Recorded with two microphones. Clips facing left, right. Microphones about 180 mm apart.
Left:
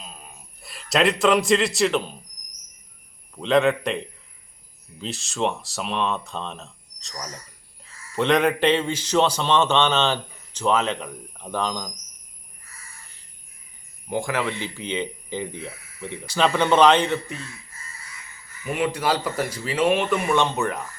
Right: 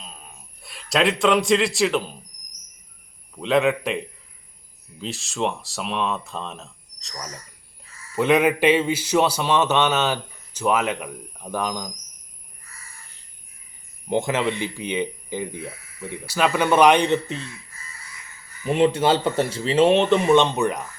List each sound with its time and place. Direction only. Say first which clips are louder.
0.0 s a sound: left 1 dB; 5° left (ahead or behind)
3.3 s a man's voice: even; centre (ahead or behind)
14.1 s a man's voice: right 3 dB; 20° right (ahead or behind)
18.6 s speech: right 5 dB; 30° right (ahead or behind)